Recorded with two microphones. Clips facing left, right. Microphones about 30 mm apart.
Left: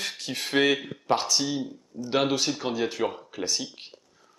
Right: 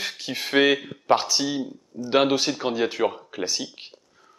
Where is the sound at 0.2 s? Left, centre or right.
Centre.